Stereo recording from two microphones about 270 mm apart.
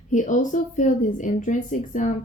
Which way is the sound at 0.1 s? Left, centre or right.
Left.